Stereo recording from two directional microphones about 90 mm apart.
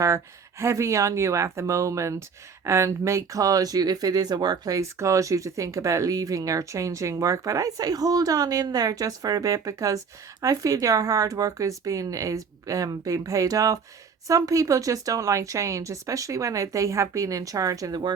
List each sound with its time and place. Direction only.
0.6 s speech: 35° right (ahead or behind)